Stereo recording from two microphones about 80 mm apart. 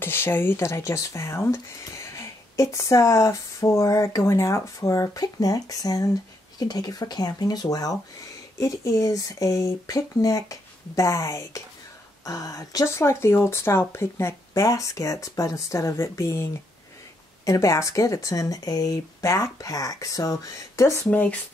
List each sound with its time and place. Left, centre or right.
0.0 s speech: left
0.6 s speech: left
17.5 s speech: left
21.1 s speech: left